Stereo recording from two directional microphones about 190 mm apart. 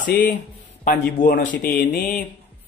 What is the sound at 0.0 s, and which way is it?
Speech, 55° left (ahead or behind).